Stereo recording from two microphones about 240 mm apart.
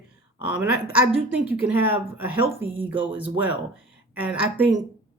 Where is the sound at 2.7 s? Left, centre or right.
Right.